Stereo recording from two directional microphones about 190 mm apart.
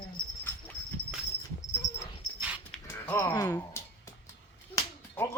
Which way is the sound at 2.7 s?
10° left (ahead or behind).